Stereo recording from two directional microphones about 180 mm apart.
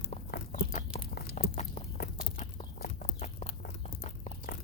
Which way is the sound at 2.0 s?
60° left (ahead or behind).